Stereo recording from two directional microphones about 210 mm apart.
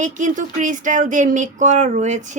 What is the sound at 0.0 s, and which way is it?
Speech, 35° right (ahead or behind).